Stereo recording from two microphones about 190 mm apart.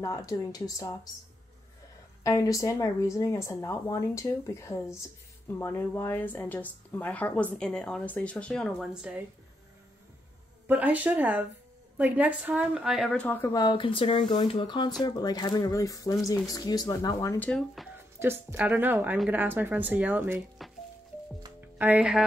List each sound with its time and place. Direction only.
0.0 s speech: 20° left (ahead or behind)
2.2 s speech: 15° left (ahead or behind); by 9.2 s 5° right (ahead or behind)
10.7 s speech: 10° right (ahead or behind); by 13.5 s 10° left (ahead or behind)
13.5 s speech: 20° left (ahead or behind)
17.5 s speech: centre (ahead or behind)
17.9 s speech: 10° right (ahead or behind)
21.7 s speech: 10° right (ahead or behind)